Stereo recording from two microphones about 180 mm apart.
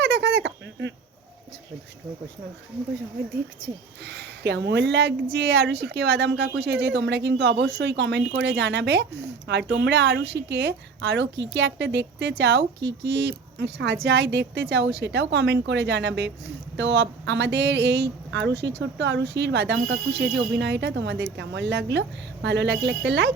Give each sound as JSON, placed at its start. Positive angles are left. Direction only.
{"t": 0.0, "sound": "squeak", "side_deg": -70}
{"t": 4.0, "sound": "speech", "side_deg": -70}